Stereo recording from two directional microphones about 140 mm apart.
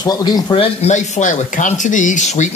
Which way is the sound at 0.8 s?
60° left (ahead or behind).